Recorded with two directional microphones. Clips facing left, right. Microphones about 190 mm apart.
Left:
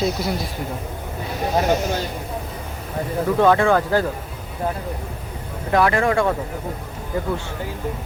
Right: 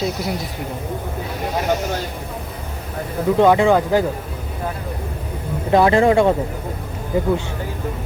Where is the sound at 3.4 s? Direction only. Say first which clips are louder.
Right 3 dB; 15° right (ahead or behind).